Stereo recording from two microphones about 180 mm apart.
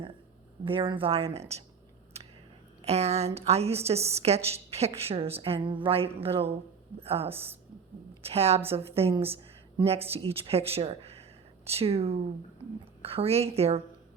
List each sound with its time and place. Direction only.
0.6 s a woman's voice: 30° right (ahead or behind)
2.8 s a woman's voice: 35° right (ahead or behind)